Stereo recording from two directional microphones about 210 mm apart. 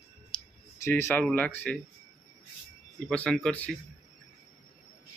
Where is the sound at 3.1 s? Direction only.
5° left (ahead or behind).